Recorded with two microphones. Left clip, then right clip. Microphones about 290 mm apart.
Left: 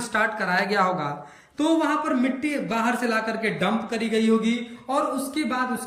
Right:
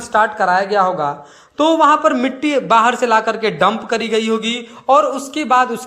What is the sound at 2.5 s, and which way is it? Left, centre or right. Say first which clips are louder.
Speech: right 16 dB; right.